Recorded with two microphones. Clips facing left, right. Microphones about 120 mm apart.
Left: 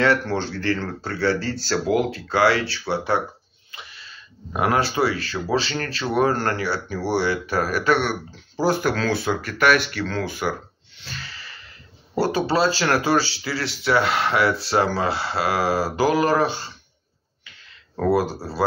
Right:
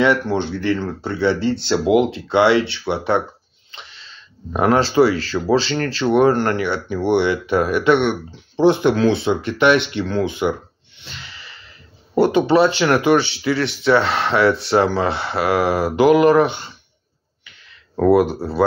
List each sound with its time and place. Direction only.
0.0 s speech: 15° right (ahead or behind)
4.6 s speech: 25° right (ahead or behind)
11.0 s snort: 20° right (ahead or behind)
12.2 s speech: 20° right (ahead or behind)
17.9 s speech: 25° right (ahead or behind)